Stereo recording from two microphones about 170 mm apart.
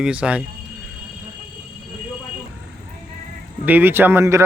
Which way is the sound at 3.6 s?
10° right (ahead or behind).